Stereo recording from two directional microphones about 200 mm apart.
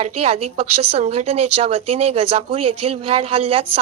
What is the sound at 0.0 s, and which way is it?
Speech, 30° right (ahead or behind).